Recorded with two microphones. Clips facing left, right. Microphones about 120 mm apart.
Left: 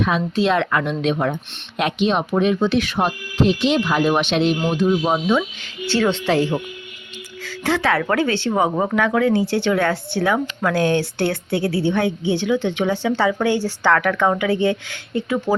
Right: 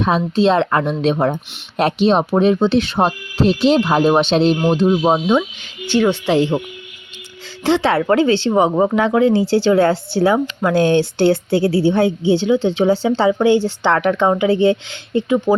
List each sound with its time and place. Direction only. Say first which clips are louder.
0.0 s speech: right 4 dB; 30° right (ahead or behind)